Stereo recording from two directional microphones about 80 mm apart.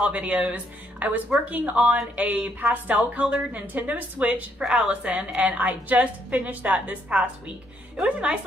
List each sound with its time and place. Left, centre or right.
0.0 s speech: centre